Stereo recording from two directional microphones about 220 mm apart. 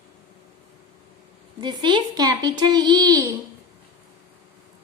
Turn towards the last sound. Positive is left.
turn(degrees=-15)  # may be behind; listen again after turning